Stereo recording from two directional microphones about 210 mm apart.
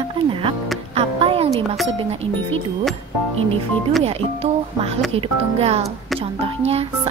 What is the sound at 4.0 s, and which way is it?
Speech, 30° right (ahead or behind).